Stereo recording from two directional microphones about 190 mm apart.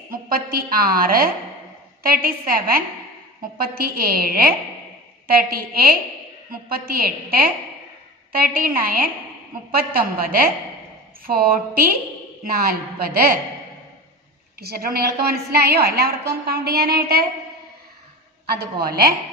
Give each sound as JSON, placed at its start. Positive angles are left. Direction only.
{"t": 0.1, "sound": "a woman's voice", "side_deg": -50}
{"t": 14.6, "sound": "a woman's voice", "side_deg": -55}
{"t": 18.5, "sound": "a woman's voice", "side_deg": -55}